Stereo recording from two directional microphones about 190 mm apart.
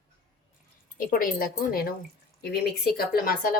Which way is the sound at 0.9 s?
50° left (ahead or behind).